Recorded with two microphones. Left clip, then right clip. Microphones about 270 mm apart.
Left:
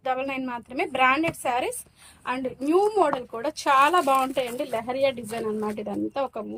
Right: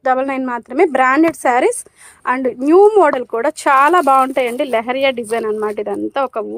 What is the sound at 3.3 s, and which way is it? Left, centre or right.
Speech, right.